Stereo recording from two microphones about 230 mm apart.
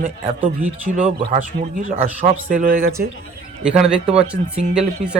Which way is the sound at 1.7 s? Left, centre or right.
Right.